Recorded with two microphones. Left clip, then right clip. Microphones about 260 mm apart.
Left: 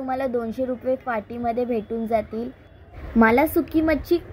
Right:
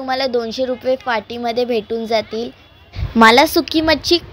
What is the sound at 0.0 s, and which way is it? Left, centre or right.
A woman's voice, centre.